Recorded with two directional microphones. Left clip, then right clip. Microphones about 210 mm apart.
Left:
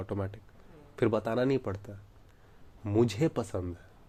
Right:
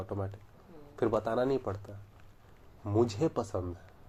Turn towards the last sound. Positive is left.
turn(degrees=40)  # may be behind; listen again after turning